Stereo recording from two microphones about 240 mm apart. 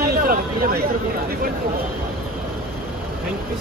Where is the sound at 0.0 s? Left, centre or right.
Right.